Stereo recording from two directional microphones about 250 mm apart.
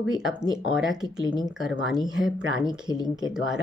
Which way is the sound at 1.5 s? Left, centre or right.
Centre.